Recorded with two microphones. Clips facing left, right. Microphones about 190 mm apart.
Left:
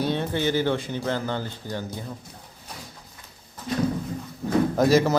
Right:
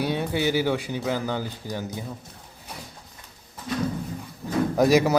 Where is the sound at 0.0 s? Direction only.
10° right (ahead or behind).